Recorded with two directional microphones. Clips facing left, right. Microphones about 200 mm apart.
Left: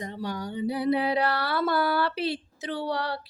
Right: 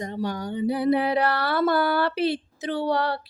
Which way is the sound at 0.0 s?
45° right (ahead or behind).